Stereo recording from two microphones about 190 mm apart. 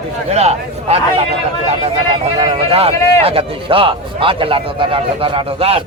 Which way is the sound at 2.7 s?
30° right (ahead or behind).